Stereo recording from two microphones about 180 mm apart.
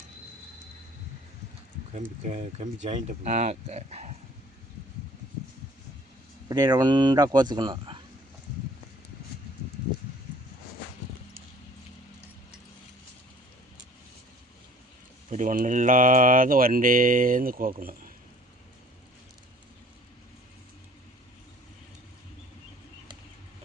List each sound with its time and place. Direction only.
2.0 s speech: 40° right (ahead or behind)
6.5 s speech: 20° right (ahead or behind)
15.3 s speech: 45° right (ahead or behind)